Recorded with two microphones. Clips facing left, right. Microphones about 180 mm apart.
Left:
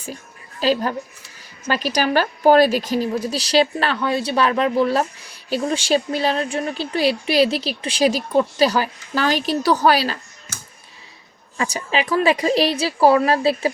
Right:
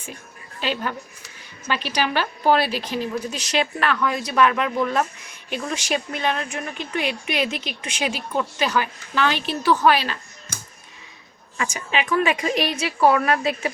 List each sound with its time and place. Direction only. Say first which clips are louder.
0.6 s a woman's voice: left 7 dB; 35° left (ahead or behind)
11.5 s a woman's voice: left 3 dB; 35° left (ahead or behind)